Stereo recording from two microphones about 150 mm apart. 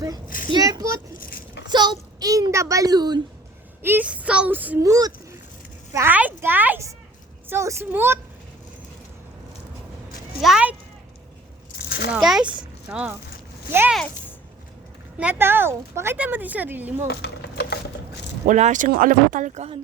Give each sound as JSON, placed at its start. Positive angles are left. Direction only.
{"t": 0.4, "sound": "a child's voice", "side_deg": -25}
{"t": 1.1, "sound": "a sound", "side_deg": 70}
{"t": 1.6, "sound": "a child's voice", "side_deg": -30}
{"t": 3.8, "sound": "speech", "side_deg": -10}
{"t": 4.9, "sound": "speech", "side_deg": -25}
{"t": 5.9, "sound": "speech", "side_deg": -15}
{"t": 10.4, "sound": "a child's voice", "side_deg": -5}
{"t": 11.9, "sound": "a sound", "side_deg": 90}
{"t": 12.1, "sound": "a child's voice", "side_deg": -5}
{"t": 15.2, "sound": "speech", "side_deg": -15}
{"t": 17.1, "sound": "a sound", "side_deg": 90}
{"t": 18.4, "sound": "speech", "side_deg": -55}